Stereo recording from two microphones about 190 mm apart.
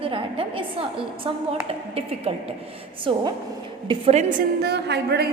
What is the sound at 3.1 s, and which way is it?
A woman's voice, 25° right (ahead or behind).